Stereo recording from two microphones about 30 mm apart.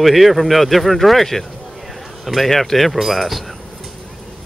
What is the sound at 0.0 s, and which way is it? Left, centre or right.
Speech, centre.